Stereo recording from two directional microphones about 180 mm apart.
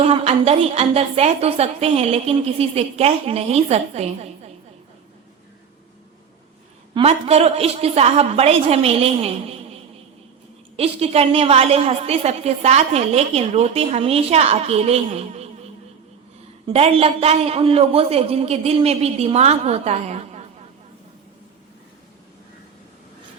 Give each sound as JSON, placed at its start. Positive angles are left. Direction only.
{"t": 0.0, "sound": "a woman's voice", "side_deg": -35}
{"t": 6.9, "sound": "a woman's voice", "side_deg": -35}
{"t": 10.8, "sound": "a woman's voice", "side_deg": -35}
{"t": 16.7, "sound": "a woman's voice", "side_deg": -35}